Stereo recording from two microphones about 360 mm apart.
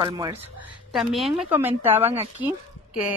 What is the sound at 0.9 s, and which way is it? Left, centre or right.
Speech, centre.